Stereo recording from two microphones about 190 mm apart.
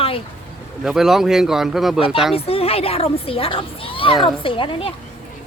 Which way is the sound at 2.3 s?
30° left (ahead or behind).